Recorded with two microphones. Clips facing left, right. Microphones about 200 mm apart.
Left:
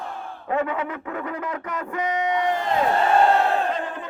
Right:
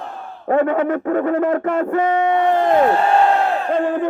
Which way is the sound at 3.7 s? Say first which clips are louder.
Right 10 dB; 60° right (ahead or behind).